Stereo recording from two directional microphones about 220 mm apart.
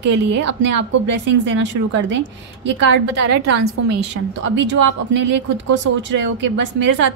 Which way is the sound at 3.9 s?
55° right (ahead or behind).